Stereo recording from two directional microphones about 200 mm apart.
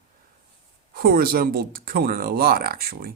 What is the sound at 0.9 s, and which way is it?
Speech, 45° right (ahead or behind).